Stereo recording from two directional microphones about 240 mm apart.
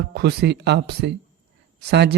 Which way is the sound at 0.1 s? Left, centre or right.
Right.